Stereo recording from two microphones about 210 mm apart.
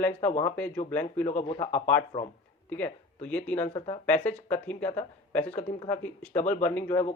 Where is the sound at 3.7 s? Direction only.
25° left (ahead or behind).